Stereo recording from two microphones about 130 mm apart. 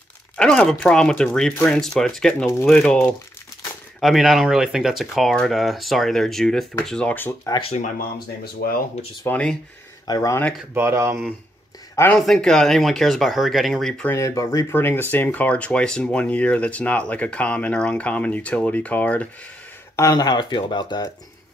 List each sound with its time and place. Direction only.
0.4 s speech: 5° left (ahead or behind)
9.2 s speech: 10° left (ahead or behind)
10.0 s speech: 30° left (ahead or behind)
10.7 s speech: 20° right (ahead or behind)
12.1 s speech: 5° left (ahead or behind)
14.0 s speech: 20° left (ahead or behind)
20.0 s speech: 30° left (ahead or behind)